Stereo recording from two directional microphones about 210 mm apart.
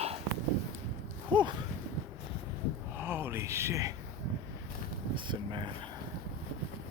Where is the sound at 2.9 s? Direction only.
10° right (ahead or behind).